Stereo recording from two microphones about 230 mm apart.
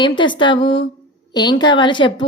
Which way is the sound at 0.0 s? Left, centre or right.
Left.